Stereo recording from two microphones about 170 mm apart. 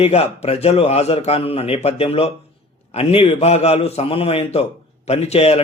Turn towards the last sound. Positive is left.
turn(degrees=40)  # may be behind; listen again after turning